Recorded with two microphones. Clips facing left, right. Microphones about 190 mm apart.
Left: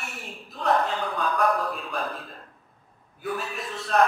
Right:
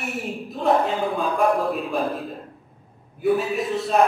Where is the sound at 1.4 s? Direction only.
25° right (ahead or behind).